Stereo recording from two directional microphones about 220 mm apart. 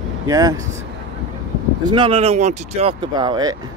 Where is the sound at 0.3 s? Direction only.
15° right (ahead or behind).